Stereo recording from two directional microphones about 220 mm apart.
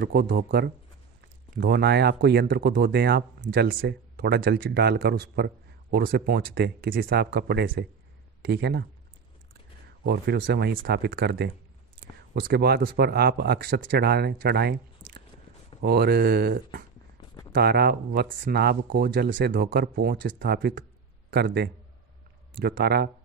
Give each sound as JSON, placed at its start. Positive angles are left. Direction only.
{"t": 0.0, "sound": "speech", "side_deg": -45}
{"t": 10.0, "sound": "a man's voice", "side_deg": -50}